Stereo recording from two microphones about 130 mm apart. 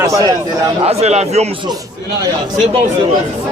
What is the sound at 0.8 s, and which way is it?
Speech, 55° right (ahead or behind).